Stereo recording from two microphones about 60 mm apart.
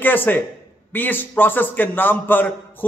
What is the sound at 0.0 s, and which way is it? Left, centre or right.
A man's voice, left.